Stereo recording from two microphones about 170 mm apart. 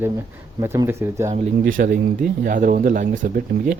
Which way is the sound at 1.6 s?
55° right (ahead or behind).